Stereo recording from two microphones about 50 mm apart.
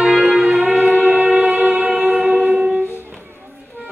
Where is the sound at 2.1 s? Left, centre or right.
Centre.